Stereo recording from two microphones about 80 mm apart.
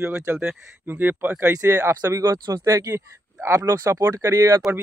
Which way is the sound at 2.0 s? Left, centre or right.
Right.